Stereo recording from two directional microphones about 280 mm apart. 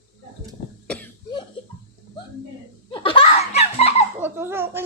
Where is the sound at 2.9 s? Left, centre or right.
Centre.